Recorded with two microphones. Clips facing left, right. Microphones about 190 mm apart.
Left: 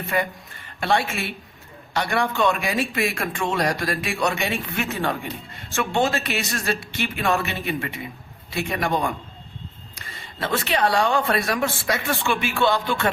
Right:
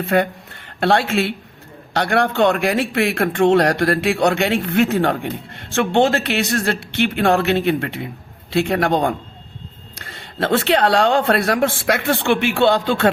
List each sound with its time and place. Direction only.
0.1 s a man's voice: 70° right (ahead or behind)